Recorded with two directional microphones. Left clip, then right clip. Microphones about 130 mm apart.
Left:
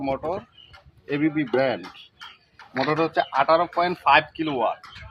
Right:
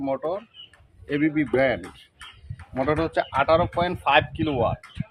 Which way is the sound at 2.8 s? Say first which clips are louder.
Left 1 dB; 20° right (ahead or behind).